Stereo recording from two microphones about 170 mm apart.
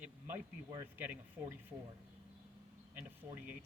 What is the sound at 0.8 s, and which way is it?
Speech, 10° right (ahead or behind).